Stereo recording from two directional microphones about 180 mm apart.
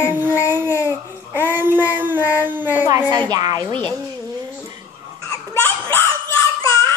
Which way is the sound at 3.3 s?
20° right (ahead or behind).